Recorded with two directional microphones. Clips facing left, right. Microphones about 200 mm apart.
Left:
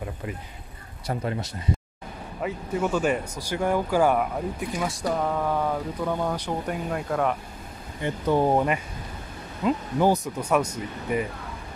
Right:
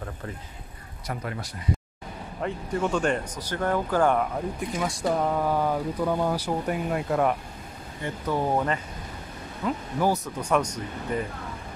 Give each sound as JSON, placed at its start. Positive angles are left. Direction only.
{"t": 0.0, "sound": "speech", "side_deg": 15}
{"t": 1.0, "sound": "speech", "side_deg": 25}
{"t": 2.4, "sound": "speech", "side_deg": 5}
{"t": 8.0, "sound": "speech", "side_deg": 20}
{"t": 10.4, "sound": "speech", "side_deg": 5}